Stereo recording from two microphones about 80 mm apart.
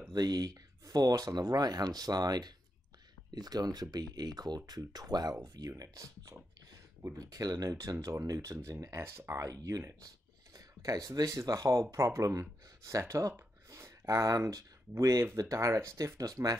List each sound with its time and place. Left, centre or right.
0.1 s speech: right
13.7 s a sound: right
14.0 s speech: right